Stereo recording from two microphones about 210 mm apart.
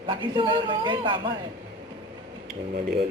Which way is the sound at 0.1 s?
25° right (ahead or behind).